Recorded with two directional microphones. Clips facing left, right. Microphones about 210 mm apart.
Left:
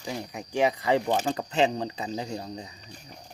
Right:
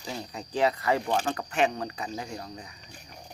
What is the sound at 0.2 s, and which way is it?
Speech, 15° left (ahead or behind).